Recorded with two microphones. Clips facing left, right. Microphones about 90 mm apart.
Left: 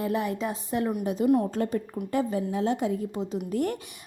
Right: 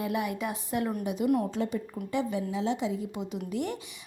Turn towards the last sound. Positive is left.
turn(degrees=45)  # may be behind; listen again after turning